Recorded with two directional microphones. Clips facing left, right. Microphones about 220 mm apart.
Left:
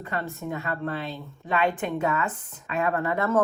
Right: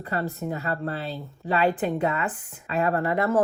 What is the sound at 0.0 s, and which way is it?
Speech, 35° right (ahead or behind).